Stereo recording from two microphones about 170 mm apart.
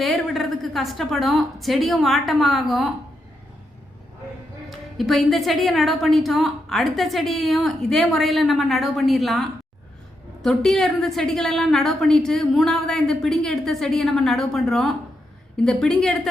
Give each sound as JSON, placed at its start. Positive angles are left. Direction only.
{"t": 0.0, "sound": "a woman's voice", "side_deg": 0}
{"t": 4.7, "sound": "a woman's voice", "side_deg": 0}